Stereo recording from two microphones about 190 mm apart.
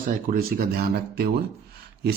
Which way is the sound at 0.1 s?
50° right (ahead or behind).